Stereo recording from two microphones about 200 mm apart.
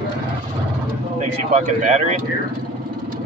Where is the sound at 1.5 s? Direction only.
35° right (ahead or behind).